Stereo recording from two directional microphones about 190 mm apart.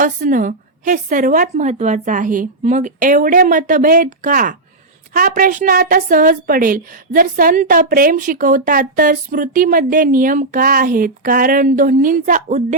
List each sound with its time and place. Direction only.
0.0 s a woman's voice: 45° right (ahead or behind)